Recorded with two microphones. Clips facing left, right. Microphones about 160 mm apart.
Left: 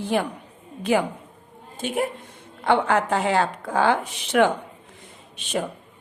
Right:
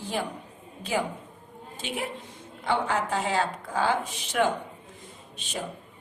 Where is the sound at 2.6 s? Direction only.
65° left (ahead or behind).